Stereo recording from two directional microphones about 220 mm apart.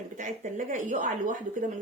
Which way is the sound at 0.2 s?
35° right (ahead or behind).